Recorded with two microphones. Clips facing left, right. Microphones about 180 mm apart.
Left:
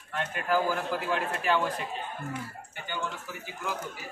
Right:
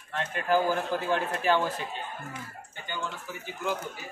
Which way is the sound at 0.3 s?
30° right (ahead or behind).